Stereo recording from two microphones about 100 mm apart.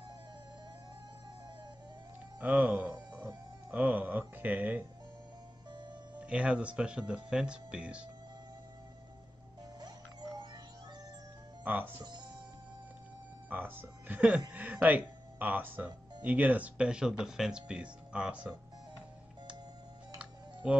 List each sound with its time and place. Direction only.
2.4 s a sound: 15° right (ahead or behind)
3.7 s speech: 15° right (ahead or behind)
6.1 s speech: 10° right (ahead or behind)
9.8 s music: 45° right (ahead or behind)
11.6 s speech: 20° right (ahead or behind)
13.5 s speech: 20° right (ahead or behind)
20.6 s speech: 10° right (ahead or behind)